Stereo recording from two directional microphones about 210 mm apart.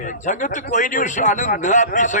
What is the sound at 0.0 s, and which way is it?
A man's voice, 35° left (ahead or behind).